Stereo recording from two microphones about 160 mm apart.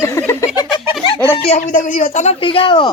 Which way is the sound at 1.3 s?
45° left (ahead or behind).